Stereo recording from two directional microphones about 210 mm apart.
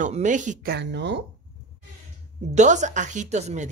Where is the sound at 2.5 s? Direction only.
35° right (ahead or behind).